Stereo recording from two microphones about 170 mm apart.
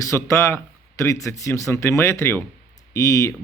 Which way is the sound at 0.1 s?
15° left (ahead or behind).